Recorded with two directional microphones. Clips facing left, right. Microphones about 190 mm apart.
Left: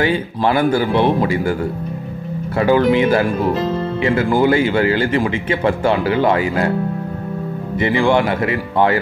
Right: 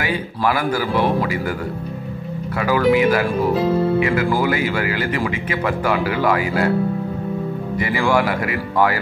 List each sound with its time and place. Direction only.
0.0 s speech: 30° left (ahead or behind)
2.6 s speech: 30° left (ahead or behind)
3.5 s music: 5° right (ahead or behind)
4.0 s speech: 30° left (ahead or behind)
7.8 s speech: 25° left (ahead or behind)